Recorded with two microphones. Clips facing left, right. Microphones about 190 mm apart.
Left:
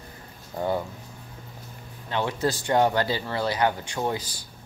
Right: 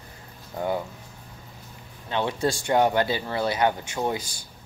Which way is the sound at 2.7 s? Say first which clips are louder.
Right 1 dB; 15° right (ahead or behind).